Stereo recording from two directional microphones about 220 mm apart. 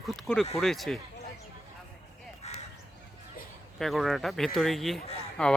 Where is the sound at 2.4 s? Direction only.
30° left (ahead or behind).